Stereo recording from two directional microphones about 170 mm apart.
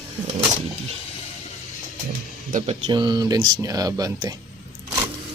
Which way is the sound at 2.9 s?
25° right (ahead or behind).